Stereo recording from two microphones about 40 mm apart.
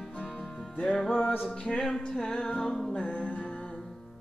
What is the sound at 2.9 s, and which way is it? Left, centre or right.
Music, left.